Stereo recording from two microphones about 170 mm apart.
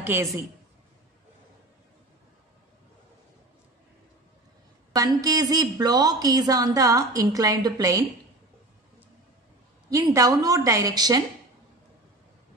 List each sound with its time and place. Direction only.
0.0 s a woman's voice: 10° right (ahead or behind)
4.9 s a woman's voice: 20° right (ahead or behind)
9.8 s a woman's voice: 20° right (ahead or behind)